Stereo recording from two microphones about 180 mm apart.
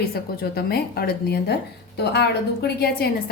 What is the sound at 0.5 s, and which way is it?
A woman's voice, 60° left (ahead or behind).